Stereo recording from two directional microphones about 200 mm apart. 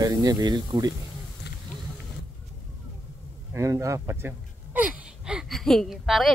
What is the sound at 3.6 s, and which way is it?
Speech, 15° right (ahead or behind).